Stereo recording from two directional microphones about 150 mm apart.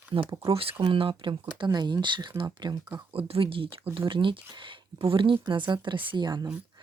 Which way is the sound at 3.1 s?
40° right (ahead or behind).